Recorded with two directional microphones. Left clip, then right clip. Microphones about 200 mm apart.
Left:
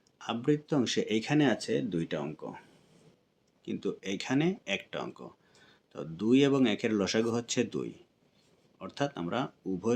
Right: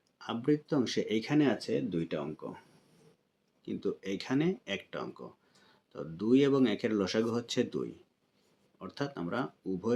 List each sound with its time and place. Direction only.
0.2 s speech: 35° left (ahead or behind)
3.7 s speech: 35° left (ahead or behind)